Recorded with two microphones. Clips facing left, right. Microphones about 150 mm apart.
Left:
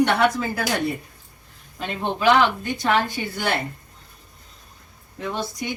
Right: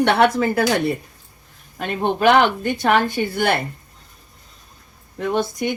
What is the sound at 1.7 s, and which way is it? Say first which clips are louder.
Speech: right 5 dB; 55° right (ahead or behind).